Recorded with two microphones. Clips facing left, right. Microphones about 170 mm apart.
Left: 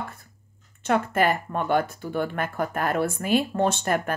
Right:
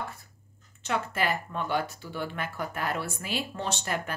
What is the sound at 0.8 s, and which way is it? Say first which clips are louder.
A woman's voice: left 7 dB; 50° left (ahead or behind).